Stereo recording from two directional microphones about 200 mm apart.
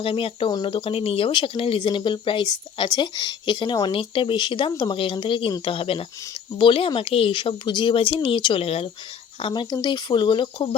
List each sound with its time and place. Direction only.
0.0 s speech: 25° left (ahead or behind)